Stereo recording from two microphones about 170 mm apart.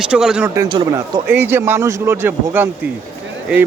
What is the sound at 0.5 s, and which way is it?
Speech, 25° right (ahead or behind).